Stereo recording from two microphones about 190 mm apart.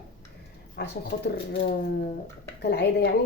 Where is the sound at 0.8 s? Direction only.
60° left (ahead or behind).